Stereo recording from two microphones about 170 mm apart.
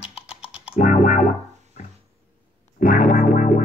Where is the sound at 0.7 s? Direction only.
50° left (ahead or behind).